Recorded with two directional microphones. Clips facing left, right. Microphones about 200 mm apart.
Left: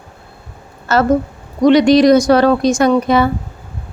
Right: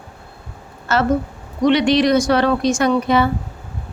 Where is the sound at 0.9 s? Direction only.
40° left (ahead or behind).